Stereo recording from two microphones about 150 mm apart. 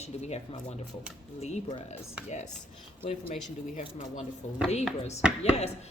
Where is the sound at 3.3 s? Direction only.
50° left (ahead or behind).